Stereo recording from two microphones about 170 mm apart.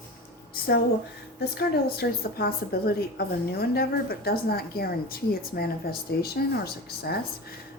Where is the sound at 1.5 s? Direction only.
65° left (ahead or behind).